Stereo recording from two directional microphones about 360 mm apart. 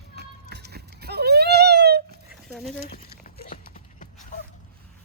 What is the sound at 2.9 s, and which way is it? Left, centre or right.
Clip-clop, left.